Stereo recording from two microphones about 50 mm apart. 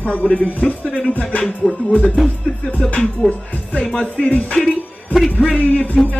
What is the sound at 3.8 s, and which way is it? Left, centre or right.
Speech, left.